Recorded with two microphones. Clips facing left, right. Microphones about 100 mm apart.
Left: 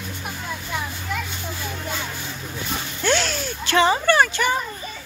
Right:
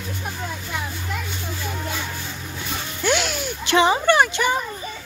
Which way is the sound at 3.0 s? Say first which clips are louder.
Even; 10° right (ahead or behind).